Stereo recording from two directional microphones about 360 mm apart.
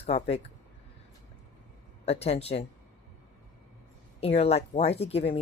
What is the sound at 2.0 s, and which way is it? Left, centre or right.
Speech, centre.